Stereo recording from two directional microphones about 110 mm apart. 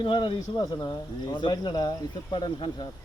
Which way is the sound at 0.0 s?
45° left (ahead or behind).